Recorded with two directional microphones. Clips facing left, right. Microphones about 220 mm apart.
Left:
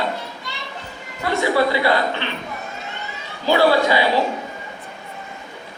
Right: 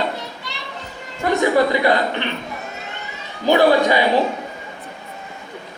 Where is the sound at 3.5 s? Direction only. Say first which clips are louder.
Right 2 dB; 20° right (ahead or behind).